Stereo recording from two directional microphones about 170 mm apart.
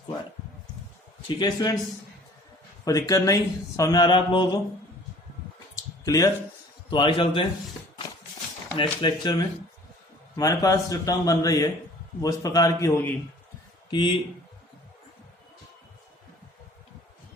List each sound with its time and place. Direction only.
1.4 s speech: 25° left (ahead or behind)
2.8 s speech: 20° left (ahead or behind)
6.1 s a man's voice: 20° left (ahead or behind)
8.7 s speech: 30° left (ahead or behind)
13.9 s a man's voice: 30° left (ahead or behind)